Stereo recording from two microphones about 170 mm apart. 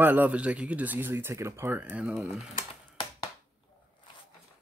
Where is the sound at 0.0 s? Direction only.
10° right (ahead or behind).